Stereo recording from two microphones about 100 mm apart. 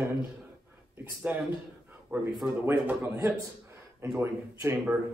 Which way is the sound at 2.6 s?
20° right (ahead or behind).